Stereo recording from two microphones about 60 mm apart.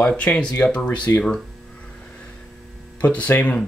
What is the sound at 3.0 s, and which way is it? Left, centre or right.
Speech, left.